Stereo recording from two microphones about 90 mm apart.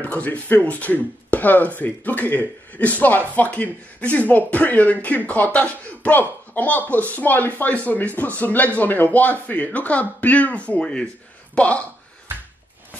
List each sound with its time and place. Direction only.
0.0 s speech: 15° left (ahead or behind)